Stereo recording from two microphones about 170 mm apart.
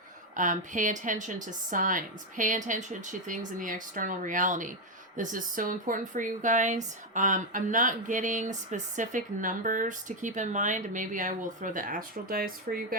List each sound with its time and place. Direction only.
0.3 s speech: 50° right (ahead or behind)